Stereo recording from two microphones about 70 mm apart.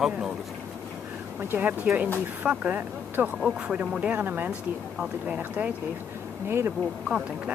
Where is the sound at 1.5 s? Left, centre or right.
Right.